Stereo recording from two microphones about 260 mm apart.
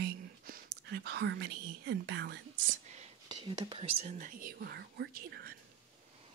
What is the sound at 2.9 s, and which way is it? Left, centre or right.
Speech, right.